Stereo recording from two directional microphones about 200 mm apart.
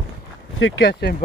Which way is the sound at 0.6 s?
70° left (ahead or behind).